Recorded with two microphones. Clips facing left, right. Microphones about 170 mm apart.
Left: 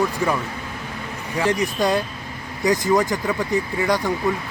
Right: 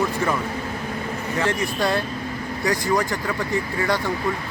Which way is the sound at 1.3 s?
15° left (ahead or behind).